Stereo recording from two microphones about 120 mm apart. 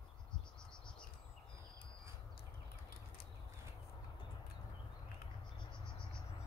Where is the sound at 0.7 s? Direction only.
5° left (ahead or behind).